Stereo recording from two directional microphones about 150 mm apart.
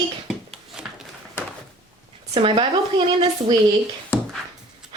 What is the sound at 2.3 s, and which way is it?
Speech, 35° right (ahead or behind).